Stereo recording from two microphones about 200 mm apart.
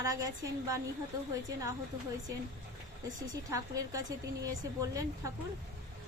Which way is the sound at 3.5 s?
15° right (ahead or behind).